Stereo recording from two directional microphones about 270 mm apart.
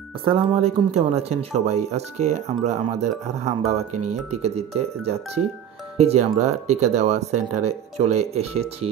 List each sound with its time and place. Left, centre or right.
0.2 s speech: right